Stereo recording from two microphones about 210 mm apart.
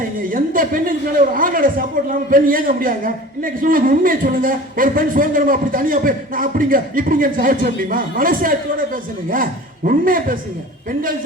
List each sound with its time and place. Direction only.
0.3 s a man's voice: 40° right (ahead or behind)